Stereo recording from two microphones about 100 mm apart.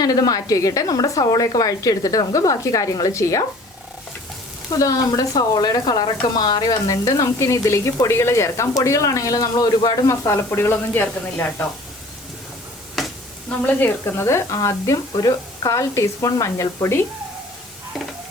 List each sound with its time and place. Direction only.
0.0 s speech: 40° left (ahead or behind)
4.8 s speech: 35° left (ahead or behind)
10.2 s speech: 25° left (ahead or behind)
13.0 s a sound: centre (ahead or behind)
13.5 s speech: 15° left (ahead or behind)